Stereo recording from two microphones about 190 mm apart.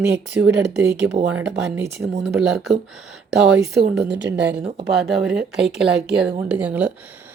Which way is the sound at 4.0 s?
5° right (ahead or behind).